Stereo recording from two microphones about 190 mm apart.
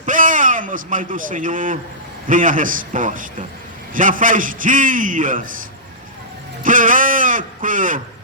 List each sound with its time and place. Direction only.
0.0 s a man's voice: 45° right (ahead or behind)
6.6 s a man's voice: 45° right (ahead or behind)